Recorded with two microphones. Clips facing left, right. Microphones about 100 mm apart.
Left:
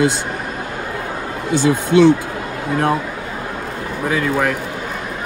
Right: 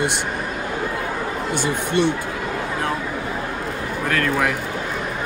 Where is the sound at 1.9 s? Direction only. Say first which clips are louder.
Left 9 dB; 90° left.